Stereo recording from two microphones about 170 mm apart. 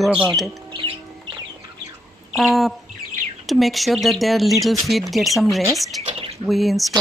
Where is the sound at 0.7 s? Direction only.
30° right (ahead or behind).